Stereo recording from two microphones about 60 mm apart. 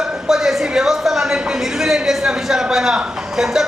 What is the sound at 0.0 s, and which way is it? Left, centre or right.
A man's voice, centre.